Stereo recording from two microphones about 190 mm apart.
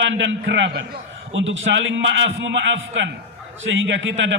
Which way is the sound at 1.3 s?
90° right.